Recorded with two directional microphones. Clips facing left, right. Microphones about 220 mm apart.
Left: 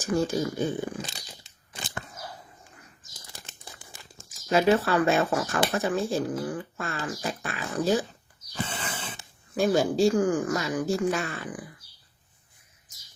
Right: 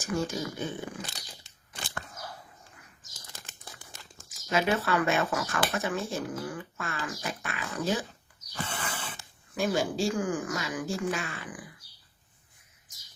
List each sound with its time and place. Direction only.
0.0 s speech: 35° left (ahead or behind)
1.0 s crunch: 20° left (ahead or behind)
4.2 s speech: 30° left (ahead or behind)
8.5 s a sound: 20° left (ahead or behind)
9.6 s speech: 40° left (ahead or behind)